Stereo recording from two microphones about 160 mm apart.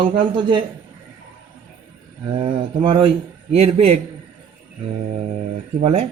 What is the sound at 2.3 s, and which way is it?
A man's voice, 30° right (ahead or behind).